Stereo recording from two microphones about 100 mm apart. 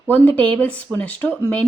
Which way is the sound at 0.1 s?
15° left (ahead or behind).